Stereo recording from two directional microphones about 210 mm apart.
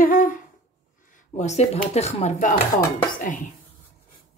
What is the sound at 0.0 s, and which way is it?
Humming, 40° left (ahead or behind).